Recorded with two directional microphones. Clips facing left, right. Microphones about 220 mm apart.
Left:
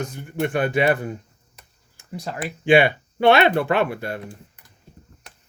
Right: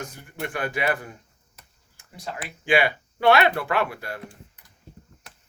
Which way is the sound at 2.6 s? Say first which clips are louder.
Left 6 dB; 25° left (ahead or behind).